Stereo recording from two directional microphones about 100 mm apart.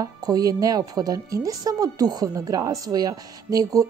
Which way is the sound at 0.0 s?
40° right (ahead or behind).